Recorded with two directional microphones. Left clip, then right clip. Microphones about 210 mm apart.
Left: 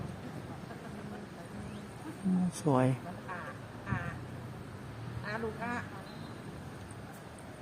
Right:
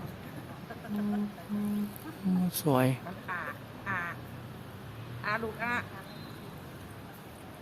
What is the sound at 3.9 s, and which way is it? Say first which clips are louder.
Quack: right 6 dB; 45° right (ahead or behind).